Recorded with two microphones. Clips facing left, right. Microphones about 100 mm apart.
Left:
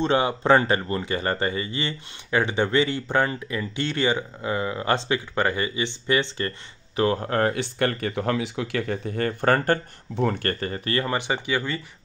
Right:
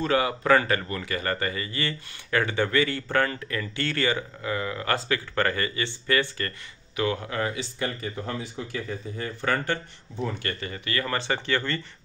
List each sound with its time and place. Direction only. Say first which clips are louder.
0.0 s speech: left 2 dB; 25° left (ahead or behind)
7.0 s speech: left 5 dB; 40° left (ahead or behind); by 9.5 s 65° left (ahead or behind)
10.4 s speech: left 6 dB; 40° left (ahead or behind)
11.0 s speech: left 1 dB; 15° left (ahead or behind)